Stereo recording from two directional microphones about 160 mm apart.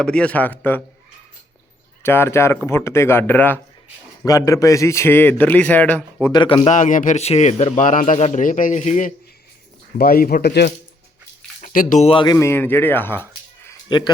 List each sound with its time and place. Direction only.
0.0 s a man's voice: 5° left (ahead or behind)
2.0 s a man's voice: 15° left (ahead or behind)
6.3 s a man's voice: 30° left (ahead or behind)
6.7 s a man's voice: 50° left (ahead or behind)
10.0 s speech: 65° left (ahead or behind); by 10.7 s 90° left
11.6 s speech: 55° left (ahead or behind)
12.0 s a man's voice: 30° left (ahead or behind); by 13.2 s 15° left (ahead or behind)
13.8 s speech: 30° left (ahead or behind)